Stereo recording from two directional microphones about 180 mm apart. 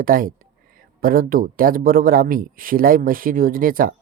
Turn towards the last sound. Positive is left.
turn(degrees=-50)  # may be behind; listen again after turning